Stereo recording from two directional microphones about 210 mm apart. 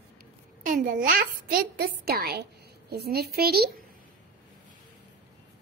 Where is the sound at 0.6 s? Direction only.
40° right (ahead or behind).